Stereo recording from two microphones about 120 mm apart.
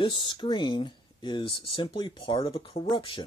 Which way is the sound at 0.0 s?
45° left (ahead or behind).